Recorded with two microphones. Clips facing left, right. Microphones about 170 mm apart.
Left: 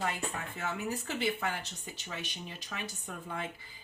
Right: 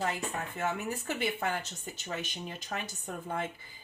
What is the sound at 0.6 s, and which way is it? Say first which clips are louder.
Speech: right 2 dB; 50° right (ahead or behind).